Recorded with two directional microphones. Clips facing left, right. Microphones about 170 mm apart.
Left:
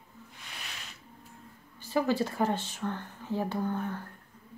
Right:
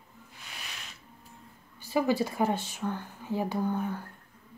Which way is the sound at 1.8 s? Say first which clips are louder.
Right 1 dB; 10° right (ahead or behind).